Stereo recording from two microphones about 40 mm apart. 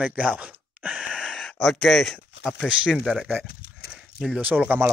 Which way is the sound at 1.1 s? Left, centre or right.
Left.